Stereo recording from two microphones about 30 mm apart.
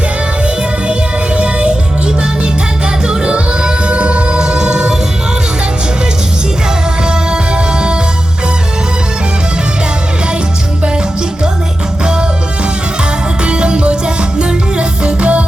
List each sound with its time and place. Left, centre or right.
1.4 s music: right
3.3 s music: right
4.4 s music: right
13.4 s music: right